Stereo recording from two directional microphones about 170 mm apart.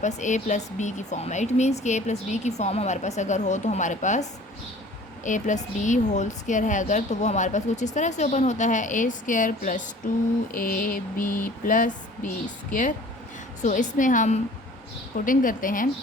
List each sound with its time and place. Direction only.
0.0 s a woman's voice: 45° left (ahead or behind)
10.5 s a sound: 55° left (ahead or behind)
13.6 s a woman's voice: 45° left (ahead or behind)